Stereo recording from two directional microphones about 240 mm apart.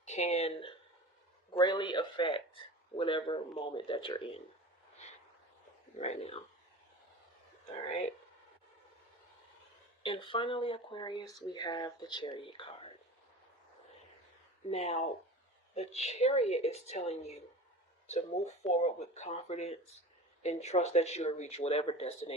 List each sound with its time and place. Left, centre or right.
0.0 s speech: left
6.0 s speech: left
10.0 s speech: left
14.7 s speech: left